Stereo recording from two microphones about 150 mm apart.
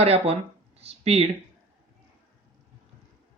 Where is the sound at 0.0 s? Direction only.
45° right (ahead or behind).